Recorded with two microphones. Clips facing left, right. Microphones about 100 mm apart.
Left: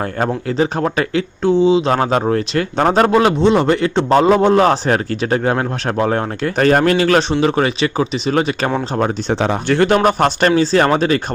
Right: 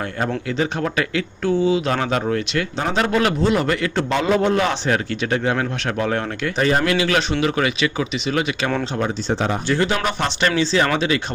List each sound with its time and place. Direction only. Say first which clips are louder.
0.2 s speech: left 5 dB; 40° left (ahead or behind)
3.2 s speech: left 6 dB; 30° left (ahead or behind)
6.6 s speech: left 6 dB; 55° left (ahead or behind); by 8.7 s 40° left (ahead or behind)
9.3 s speech: left 3 dB; 80° left; by 11.2 s 40° left (ahead or behind)